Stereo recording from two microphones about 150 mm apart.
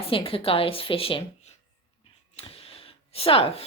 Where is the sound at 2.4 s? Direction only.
40° left (ahead or behind).